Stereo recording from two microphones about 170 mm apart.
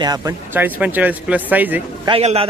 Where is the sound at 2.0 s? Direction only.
35° right (ahead or behind).